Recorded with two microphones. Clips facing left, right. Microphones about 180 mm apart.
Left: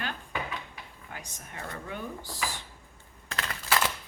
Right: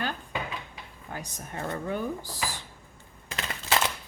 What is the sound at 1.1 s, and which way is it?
Speech, 35° right (ahead or behind).